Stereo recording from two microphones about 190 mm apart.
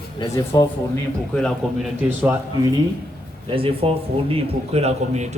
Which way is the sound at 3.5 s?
30° right (ahead or behind).